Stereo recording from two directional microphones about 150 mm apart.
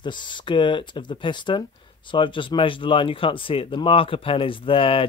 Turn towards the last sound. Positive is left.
turn(degrees=35)  # may be behind; listen again after turning